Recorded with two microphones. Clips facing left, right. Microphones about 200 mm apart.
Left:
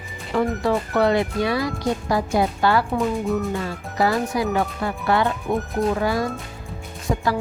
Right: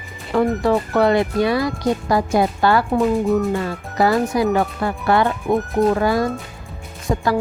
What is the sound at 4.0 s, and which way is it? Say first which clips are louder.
Speech: right 4 dB; 60° right (ahead or behind).